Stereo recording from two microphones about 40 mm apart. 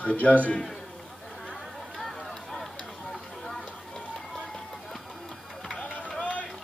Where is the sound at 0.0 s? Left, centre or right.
Left.